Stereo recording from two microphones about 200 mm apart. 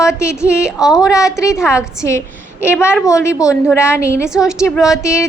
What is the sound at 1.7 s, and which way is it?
Speech, 15° left (ahead or behind).